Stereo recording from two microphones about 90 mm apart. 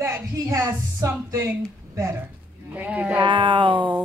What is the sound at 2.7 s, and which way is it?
Speech, 15° right (ahead or behind).